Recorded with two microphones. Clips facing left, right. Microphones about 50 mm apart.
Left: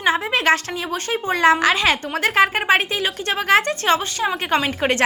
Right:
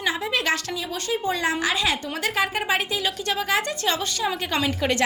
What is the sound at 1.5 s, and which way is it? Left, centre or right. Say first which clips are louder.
A woman's voice: left 10 dB; left.